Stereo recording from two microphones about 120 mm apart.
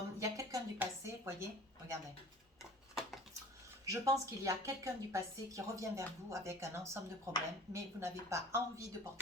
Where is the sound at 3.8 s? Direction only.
30° right (ahead or behind).